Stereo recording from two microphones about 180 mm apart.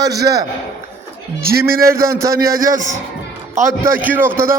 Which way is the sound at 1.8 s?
15° right (ahead or behind).